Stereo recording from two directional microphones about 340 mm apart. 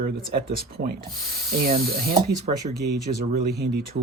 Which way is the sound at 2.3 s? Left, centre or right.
Centre.